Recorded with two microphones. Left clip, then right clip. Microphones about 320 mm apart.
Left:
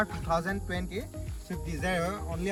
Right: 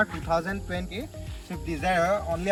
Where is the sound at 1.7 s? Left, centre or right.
Centre.